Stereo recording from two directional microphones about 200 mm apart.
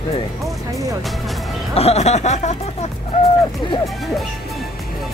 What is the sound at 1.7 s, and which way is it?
Speech, 30° left (ahead or behind).